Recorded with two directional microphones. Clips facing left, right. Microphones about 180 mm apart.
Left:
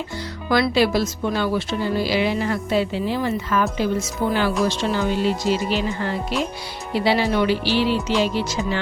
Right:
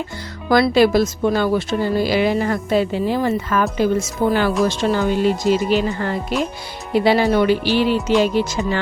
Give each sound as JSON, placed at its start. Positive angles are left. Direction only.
{"t": 0.5, "sound": "speech", "side_deg": -45}